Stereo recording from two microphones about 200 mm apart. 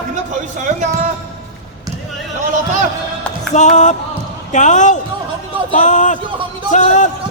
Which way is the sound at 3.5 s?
35° left (ahead or behind).